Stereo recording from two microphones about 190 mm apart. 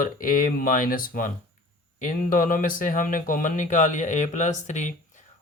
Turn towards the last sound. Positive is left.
turn(degrees=40)  # may be behind; listen again after turning